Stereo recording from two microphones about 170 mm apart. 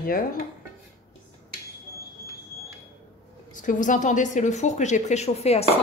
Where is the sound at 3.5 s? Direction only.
50° left (ahead or behind).